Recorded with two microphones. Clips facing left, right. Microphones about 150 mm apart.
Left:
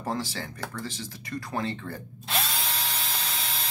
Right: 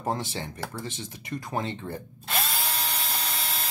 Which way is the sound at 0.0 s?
20° right (ahead or behind).